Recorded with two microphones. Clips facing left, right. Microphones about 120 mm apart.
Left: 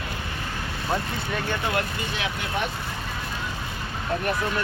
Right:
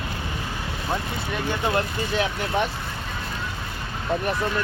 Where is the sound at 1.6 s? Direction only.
30° right (ahead or behind).